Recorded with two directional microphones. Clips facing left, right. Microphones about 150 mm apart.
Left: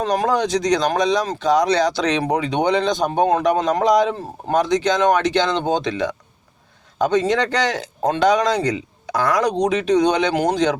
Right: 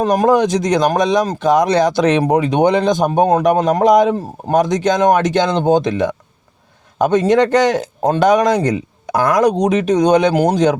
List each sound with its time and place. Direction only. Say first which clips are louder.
0.0 s speech: right 6 dB; 50° right (ahead or behind)